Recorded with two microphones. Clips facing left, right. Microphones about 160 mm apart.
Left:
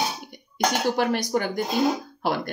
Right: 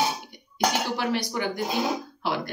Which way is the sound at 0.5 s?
50° left (ahead or behind).